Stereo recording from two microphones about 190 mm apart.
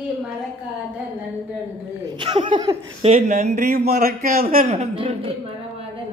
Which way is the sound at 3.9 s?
50° right (ahead or behind).